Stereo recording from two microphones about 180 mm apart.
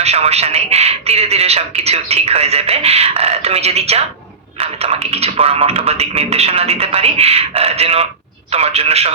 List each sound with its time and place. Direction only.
0.0 s a man's voice: 35° right (ahead or behind)